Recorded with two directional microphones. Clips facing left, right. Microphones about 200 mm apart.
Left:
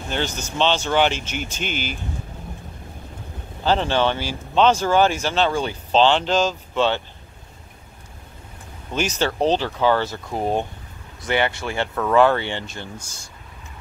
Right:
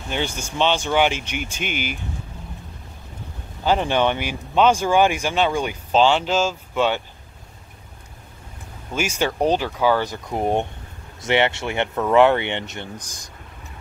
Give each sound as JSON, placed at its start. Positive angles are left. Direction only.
{"t": 0.1, "sound": "speech", "side_deg": -10}
{"t": 3.6, "sound": "speech", "side_deg": -15}
{"t": 8.9, "sound": "speech", "side_deg": -10}